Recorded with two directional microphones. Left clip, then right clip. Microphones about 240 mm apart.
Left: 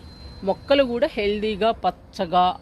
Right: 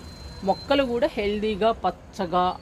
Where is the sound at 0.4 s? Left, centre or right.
Left.